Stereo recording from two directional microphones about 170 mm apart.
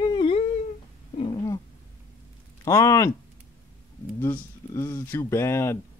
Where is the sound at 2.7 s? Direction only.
20° left (ahead or behind).